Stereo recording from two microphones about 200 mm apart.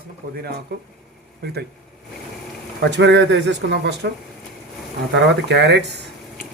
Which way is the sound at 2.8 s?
60° right (ahead or behind).